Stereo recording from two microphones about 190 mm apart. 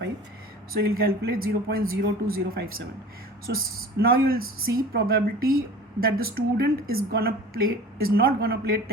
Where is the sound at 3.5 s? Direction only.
50° right (ahead or behind).